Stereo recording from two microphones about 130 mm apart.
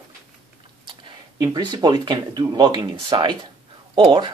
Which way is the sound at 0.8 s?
35° right (ahead or behind).